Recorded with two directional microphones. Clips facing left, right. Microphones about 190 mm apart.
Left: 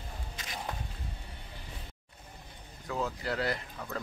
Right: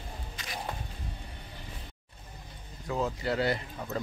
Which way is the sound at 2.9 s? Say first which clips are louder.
Right 3 dB; 5° right (ahead or behind).